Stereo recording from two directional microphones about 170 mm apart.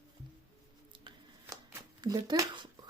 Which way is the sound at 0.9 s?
30° right (ahead or behind).